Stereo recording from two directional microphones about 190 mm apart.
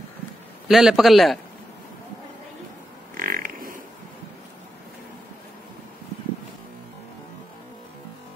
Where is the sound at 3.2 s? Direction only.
50° right (ahead or behind).